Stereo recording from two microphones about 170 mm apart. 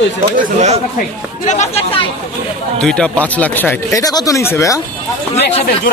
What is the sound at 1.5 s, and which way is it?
Speech, 40° left (ahead or behind).